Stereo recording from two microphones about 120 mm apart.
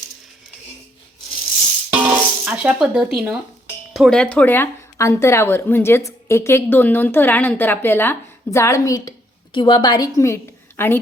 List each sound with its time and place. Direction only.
1.9 s music: 10° right (ahead or behind)
3.9 s a woman's voice: centre (ahead or behind); by 9.1 s 25° left (ahead or behind)
9.5 s a woman's voice: 40° left (ahead or behind); by 11.0 s 20° left (ahead or behind)